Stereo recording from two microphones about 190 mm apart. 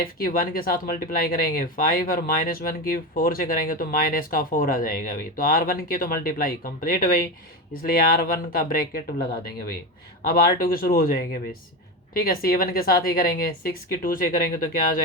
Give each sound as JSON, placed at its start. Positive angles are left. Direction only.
{"t": 0.0, "sound": "speech", "side_deg": 50}